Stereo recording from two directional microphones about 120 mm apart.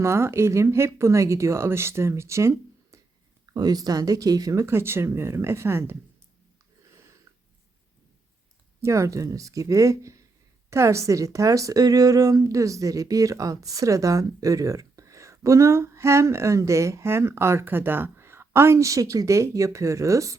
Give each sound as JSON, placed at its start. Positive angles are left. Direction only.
{"t": 0.0, "sound": "speech", "side_deg": -20}
{"t": 8.8, "sound": "speech", "side_deg": -25}